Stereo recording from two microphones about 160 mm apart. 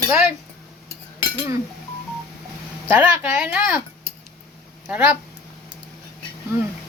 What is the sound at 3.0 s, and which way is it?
Speech, 15° right (ahead or behind).